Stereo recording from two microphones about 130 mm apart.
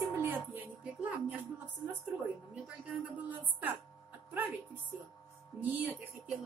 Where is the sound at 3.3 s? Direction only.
15° right (ahead or behind).